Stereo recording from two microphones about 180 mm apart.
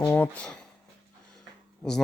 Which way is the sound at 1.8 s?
5° left (ahead or behind).